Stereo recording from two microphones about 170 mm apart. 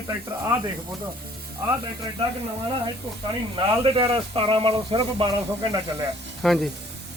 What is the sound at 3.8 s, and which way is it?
Speech, 30° right (ahead or behind).